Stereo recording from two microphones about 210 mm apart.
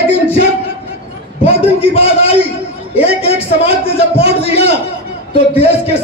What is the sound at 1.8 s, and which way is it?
Speech, 25° left (ahead or behind).